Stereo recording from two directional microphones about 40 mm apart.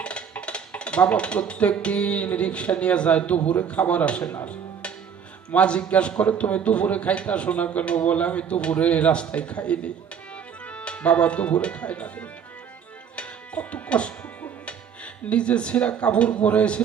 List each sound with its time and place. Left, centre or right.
0.0 s music: left
5.5 s a man's voice: left
13.1 s music: left
14.6 s speech: left